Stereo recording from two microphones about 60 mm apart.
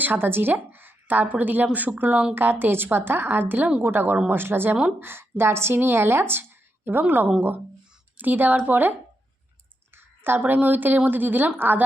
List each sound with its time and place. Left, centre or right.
0.0 s a woman's voice: right
8.2 s a woman's voice: right